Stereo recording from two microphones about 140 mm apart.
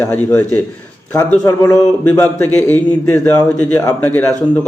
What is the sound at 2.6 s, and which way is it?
Speech, 10° left (ahead or behind).